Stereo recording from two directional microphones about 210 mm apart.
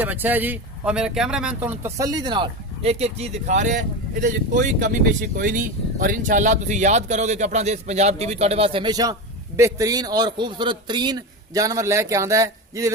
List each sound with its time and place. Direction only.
0.0 s speech: 10° right (ahead or behind)
2.0 s a man's voice: 15° right (ahead or behind)